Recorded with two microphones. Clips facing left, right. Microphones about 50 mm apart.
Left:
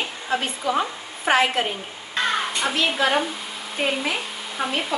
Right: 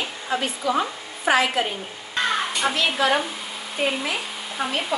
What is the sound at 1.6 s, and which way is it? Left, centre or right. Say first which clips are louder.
Speech: even; left.